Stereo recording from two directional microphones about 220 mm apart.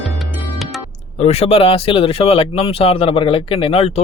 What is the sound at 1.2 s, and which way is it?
Speech, 30° left (ahead or behind).